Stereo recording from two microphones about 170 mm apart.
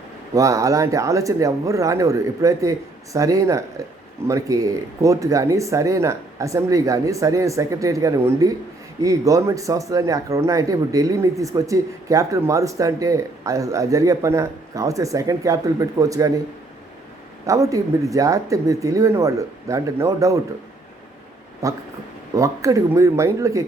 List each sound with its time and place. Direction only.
0.3 s speech: 20° right (ahead or behind)
17.4 s speech: 20° right (ahead or behind)
21.6 s speech: 20° right (ahead or behind)